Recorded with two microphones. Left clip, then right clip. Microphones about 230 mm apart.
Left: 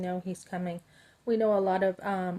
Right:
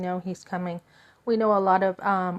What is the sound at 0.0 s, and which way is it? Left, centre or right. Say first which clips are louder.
A woman's voice: right 4 dB; centre.